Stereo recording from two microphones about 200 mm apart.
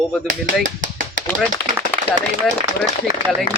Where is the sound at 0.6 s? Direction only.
40° right (ahead or behind).